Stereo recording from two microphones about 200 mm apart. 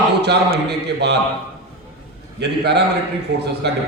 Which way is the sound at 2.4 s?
55° right (ahead or behind).